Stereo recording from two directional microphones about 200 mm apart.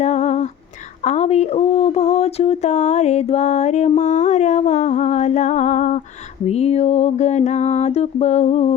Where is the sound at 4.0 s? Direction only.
35° left (ahead or behind).